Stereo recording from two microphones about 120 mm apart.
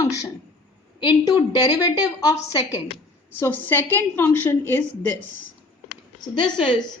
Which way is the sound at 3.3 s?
15° left (ahead or behind).